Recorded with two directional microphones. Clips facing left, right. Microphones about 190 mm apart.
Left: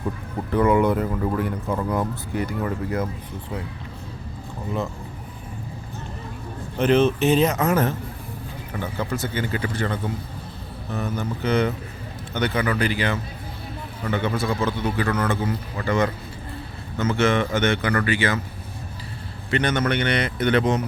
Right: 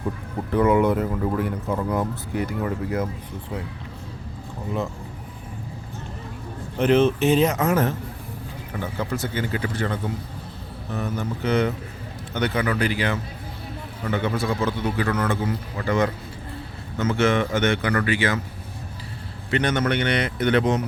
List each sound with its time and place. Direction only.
0.5 s a man's voice: 5° right (ahead or behind)
6.7 s a man's voice: 10° right (ahead or behind)
19.5 s a man's voice: 15° right (ahead or behind)